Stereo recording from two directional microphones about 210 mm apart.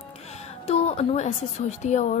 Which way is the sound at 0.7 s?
30° left (ahead or behind).